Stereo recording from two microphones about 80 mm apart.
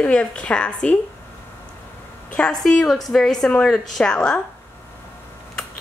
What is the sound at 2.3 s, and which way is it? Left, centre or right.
A woman's voice, centre.